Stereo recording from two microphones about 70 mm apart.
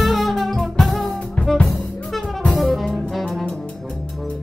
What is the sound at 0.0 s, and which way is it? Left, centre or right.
Music, centre.